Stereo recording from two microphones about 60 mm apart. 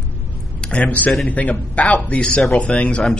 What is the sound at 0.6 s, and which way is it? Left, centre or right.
A man's voice, centre.